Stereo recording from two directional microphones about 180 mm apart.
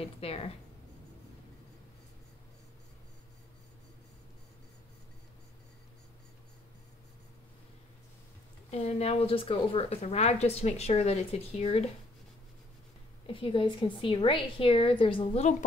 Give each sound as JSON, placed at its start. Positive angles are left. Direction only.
{"t": 0.2, "sound": "speech", "side_deg": 35}
{"t": 8.6, "sound": "speech", "side_deg": 35}
{"t": 13.3, "sound": "a woman's voice", "side_deg": 30}